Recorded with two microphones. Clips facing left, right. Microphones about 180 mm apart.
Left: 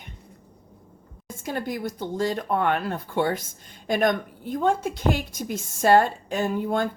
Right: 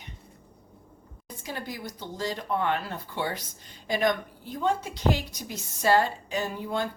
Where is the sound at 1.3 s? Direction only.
50° left (ahead or behind).